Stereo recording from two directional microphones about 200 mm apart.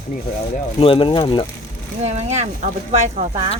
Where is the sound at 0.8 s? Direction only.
25° left (ahead or behind).